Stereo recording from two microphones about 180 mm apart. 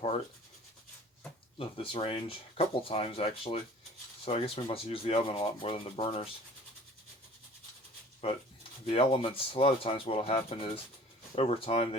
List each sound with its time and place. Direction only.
1.5 s speech: 30° left (ahead or behind)
8.9 s speech: 30° left (ahead or behind)